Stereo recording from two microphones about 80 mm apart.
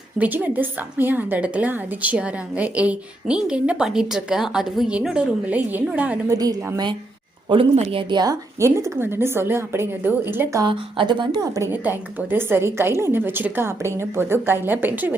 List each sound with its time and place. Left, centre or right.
0.2 s a woman's voice: right
6.3 s a woman's voice: right
8.1 s a woman's voice: right
8.5 s a woman's voice: right
10.7 s a woman's voice: right
11.7 s a woman's voice: right